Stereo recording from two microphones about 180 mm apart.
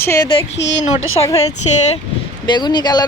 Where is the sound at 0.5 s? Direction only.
80° left.